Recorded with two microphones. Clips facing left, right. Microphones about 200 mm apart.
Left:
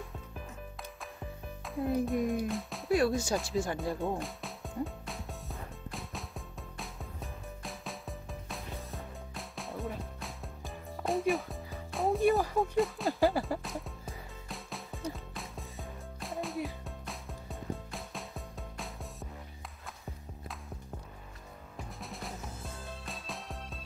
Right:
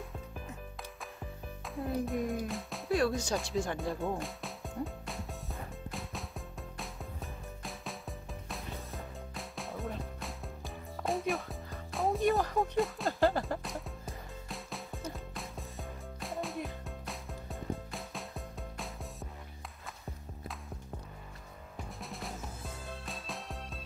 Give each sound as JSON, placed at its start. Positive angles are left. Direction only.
{"t": 1.7, "sound": "speech", "side_deg": 0}
{"t": 4.2, "sound": "music", "side_deg": 0}
{"t": 21.7, "sound": "music", "side_deg": 0}